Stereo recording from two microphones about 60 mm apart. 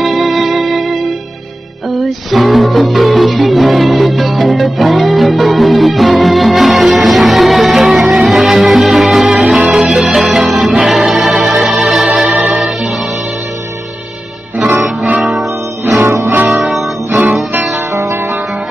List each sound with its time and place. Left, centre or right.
0.0 s music: centre
14.7 s music: right
16.4 s music: centre